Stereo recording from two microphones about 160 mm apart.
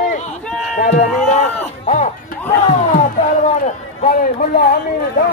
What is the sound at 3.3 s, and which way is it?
A man's voice, 50° left (ahead or behind).